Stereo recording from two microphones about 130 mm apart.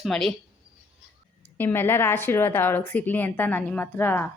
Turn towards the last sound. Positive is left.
turn(degrees=15)  # may be behind; listen again after turning